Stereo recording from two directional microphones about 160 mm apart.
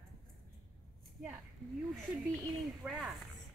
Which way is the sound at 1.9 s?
Centre (ahead or behind).